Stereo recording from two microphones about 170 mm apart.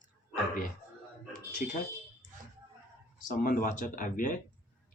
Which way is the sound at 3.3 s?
55° left (ahead or behind).